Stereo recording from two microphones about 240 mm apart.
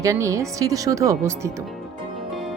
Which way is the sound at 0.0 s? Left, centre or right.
Centre.